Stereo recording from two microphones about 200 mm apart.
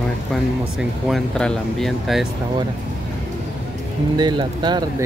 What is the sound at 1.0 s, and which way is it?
Speech, centre (ahead or behind).